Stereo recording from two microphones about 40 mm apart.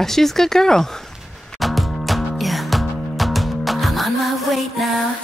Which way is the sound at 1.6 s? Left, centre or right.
Centre.